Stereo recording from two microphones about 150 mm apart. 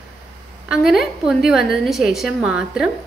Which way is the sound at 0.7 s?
Centre (ahead or behind).